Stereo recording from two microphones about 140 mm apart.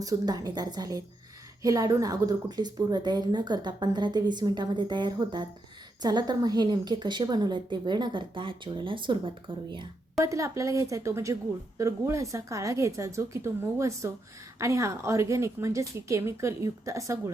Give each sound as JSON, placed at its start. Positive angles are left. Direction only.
{"t": 0.0, "sound": "a woman's voice", "side_deg": -25}
{"t": 10.2, "sound": "a woman's voice", "side_deg": -20}